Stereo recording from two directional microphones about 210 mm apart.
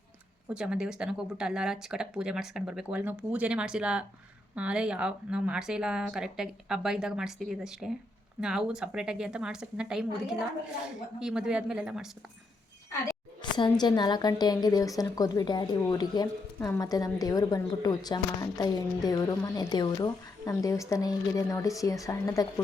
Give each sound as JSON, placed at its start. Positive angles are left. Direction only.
{"t": 0.5, "sound": "speech", "side_deg": -5}
{"t": 12.9, "sound": "a woman's voice", "side_deg": 20}